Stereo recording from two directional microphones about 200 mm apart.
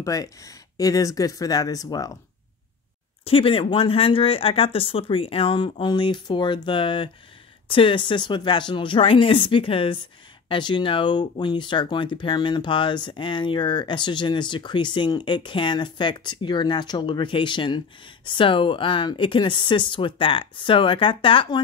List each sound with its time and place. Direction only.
0.0 s speech: 15° left (ahead or behind)
3.3 s speech: 25° left (ahead or behind)